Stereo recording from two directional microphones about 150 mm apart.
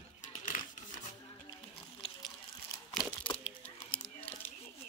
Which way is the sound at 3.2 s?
35° left (ahead or behind).